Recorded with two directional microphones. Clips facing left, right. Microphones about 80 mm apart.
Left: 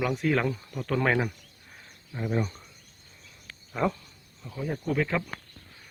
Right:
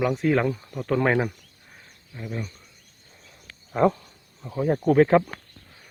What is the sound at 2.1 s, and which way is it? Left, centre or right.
Speech, left.